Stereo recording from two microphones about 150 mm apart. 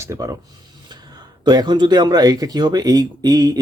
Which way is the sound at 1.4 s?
30° right (ahead or behind).